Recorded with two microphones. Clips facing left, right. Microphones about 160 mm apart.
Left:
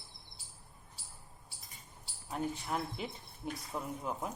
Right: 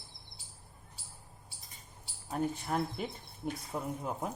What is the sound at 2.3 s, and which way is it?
Speech, 45° right (ahead or behind).